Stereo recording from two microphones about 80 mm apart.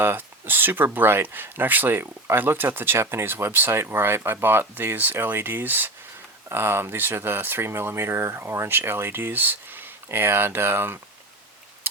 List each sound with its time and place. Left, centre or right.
0.0 s speech: right